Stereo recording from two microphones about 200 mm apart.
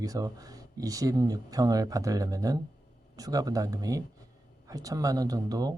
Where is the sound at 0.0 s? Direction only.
20° right (ahead or behind).